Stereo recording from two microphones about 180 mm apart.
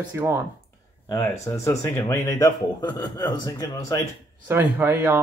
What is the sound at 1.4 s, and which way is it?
A man's voice, 15° left (ahead or behind).